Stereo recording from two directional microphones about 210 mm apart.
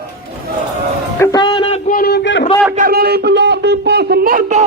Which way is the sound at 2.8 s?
45° right (ahead or behind).